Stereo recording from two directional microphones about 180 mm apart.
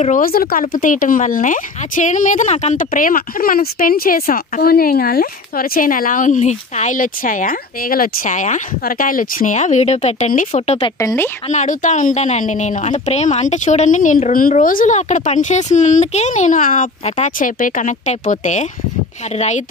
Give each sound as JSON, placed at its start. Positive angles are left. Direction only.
{"t": 0.0, "sound": "speech", "side_deg": 50}
{"t": 10.8, "sound": "speech", "side_deg": 20}
{"t": 11.4, "sound": "speech", "side_deg": 45}